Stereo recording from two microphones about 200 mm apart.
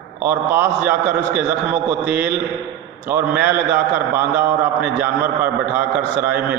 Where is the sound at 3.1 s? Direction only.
10° right (ahead or behind).